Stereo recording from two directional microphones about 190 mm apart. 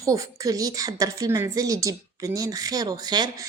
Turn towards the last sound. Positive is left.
turn(degrees=-20)  # may be behind; listen again after turning